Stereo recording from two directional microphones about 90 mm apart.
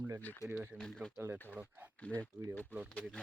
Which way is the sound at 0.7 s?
10° left (ahead or behind).